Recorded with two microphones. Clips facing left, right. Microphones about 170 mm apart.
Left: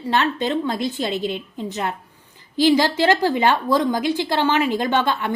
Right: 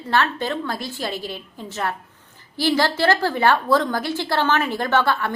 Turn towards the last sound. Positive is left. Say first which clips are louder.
# even
turn(degrees=20)  # may be behind; listen again after turning